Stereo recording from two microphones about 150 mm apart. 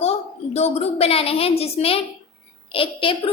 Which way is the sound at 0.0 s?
45° left (ahead or behind).